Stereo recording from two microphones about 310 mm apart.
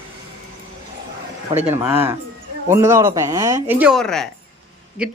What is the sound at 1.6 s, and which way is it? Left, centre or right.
Speech, centre.